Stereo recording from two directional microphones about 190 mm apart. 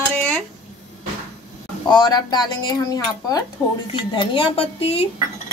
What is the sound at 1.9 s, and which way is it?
A woman's voice, 20° left (ahead or behind).